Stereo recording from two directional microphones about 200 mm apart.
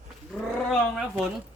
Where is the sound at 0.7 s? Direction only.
Centre (ahead or behind).